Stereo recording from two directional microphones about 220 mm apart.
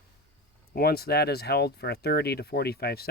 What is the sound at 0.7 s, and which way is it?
Speech, 45° left (ahead or behind).